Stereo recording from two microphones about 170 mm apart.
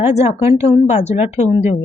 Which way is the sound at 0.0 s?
40° left (ahead or behind).